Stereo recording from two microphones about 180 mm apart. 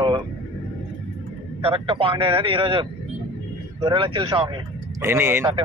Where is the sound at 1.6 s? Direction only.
30° right (ahead or behind).